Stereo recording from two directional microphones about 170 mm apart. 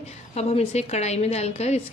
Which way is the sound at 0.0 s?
40° left (ahead or behind).